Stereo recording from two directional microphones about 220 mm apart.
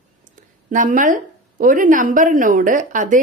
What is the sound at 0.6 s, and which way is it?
Speech, 35° right (ahead or behind).